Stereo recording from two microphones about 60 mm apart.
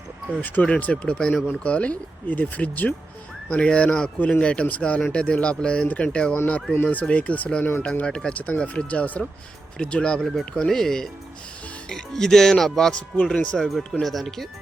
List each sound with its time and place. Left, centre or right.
0.6 s speech: left
8.0 s speech: centre
9.7 s speech: centre
13.3 s speech: left
13.6 s speech: centre